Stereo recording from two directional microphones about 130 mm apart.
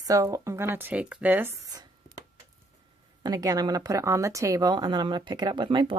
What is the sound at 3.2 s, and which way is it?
Speech, 30° right (ahead or behind).